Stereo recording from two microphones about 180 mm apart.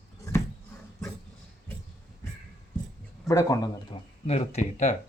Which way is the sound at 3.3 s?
20° left (ahead or behind).